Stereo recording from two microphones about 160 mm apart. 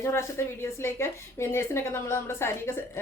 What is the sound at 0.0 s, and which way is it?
A woman's voice, 15° left (ahead or behind).